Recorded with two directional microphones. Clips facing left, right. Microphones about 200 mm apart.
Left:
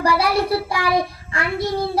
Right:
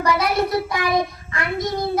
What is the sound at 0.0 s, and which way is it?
Child singing, 30° left (ahead or behind).